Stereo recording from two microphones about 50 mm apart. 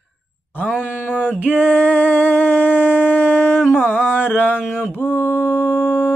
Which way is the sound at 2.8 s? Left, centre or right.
Centre.